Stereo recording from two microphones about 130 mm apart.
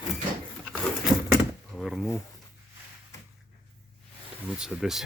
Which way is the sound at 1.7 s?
Centre (ahead or behind).